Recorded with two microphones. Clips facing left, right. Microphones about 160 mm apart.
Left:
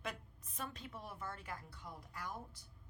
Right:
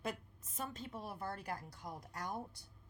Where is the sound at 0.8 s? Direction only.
30° right (ahead or behind).